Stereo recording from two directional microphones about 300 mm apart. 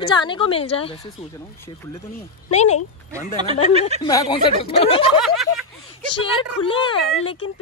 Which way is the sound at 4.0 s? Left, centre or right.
Centre.